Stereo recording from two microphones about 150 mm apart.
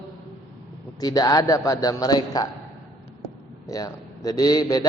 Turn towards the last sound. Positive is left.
turn(degrees=25)  # may be behind; listen again after turning